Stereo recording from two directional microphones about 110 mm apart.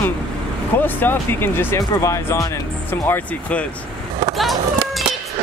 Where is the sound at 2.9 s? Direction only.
20° left (ahead or behind).